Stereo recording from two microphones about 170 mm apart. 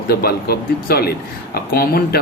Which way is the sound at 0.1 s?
65° left (ahead or behind).